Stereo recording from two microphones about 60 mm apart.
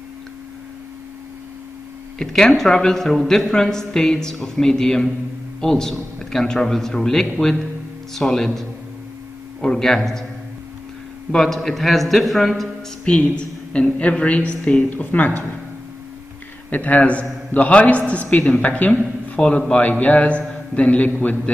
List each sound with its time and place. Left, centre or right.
2.1 s speech: centre
11.3 s a man's voice: centre
13.0 s a woman's voice: centre
14.9 s speech: left
16.7 s a woman's voice: left